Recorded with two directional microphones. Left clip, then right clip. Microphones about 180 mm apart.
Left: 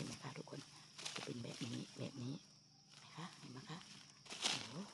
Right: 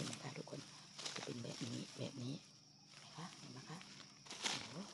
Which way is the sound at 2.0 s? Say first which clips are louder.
Right 1 dB; 10° left (ahead or behind).